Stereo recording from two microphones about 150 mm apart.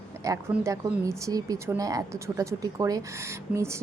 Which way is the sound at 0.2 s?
20° right (ahead or behind).